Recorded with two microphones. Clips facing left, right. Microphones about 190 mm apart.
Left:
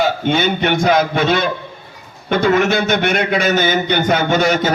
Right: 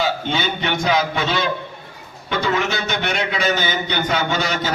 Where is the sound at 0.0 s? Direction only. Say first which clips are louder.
Left 6 dB; 50° left (ahead or behind).